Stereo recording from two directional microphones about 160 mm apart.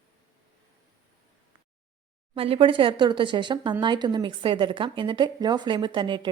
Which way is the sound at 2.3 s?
35° right (ahead or behind).